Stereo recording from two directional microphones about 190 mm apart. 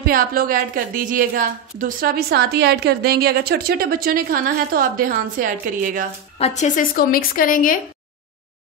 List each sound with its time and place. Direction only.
0.0 s a woman's voice: 50° right (ahead or behind)
6.3 s a woman's voice: 35° left (ahead or behind)